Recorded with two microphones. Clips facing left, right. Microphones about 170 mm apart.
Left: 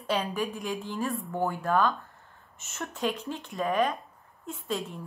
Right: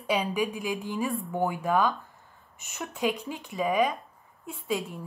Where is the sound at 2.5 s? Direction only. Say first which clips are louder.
Even; 15° right (ahead or behind).